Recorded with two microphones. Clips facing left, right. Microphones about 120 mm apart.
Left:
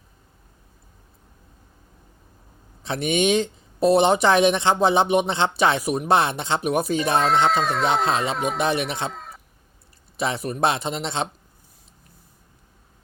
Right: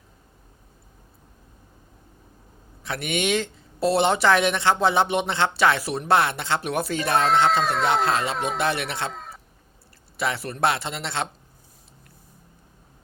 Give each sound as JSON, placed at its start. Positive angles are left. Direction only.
{"t": 2.8, "sound": "speech", "side_deg": 20}
{"t": 7.2, "sound": "speech", "side_deg": 0}
{"t": 8.5, "sound": "speech", "side_deg": 15}
{"t": 9.1, "sound": "a sound", "side_deg": 0}
{"t": 10.2, "sound": "speech", "side_deg": 20}